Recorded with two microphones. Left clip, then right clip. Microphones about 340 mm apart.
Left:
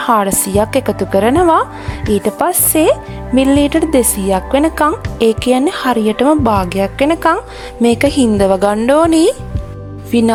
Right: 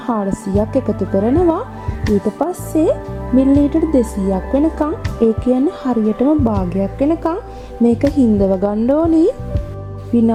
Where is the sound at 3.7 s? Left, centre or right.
Left.